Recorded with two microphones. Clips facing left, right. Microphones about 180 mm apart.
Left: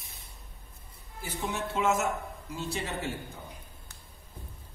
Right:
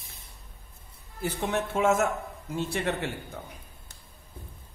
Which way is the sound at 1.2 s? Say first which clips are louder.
Right 5 dB; 60° right (ahead or behind).